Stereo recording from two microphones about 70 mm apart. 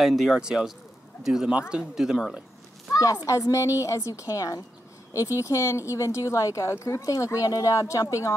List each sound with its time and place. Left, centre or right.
0.0 s speech: centre
2.9 s a sound: left
3.3 s speech: left